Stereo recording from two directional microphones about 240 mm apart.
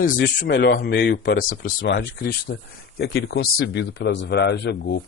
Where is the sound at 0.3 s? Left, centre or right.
Left.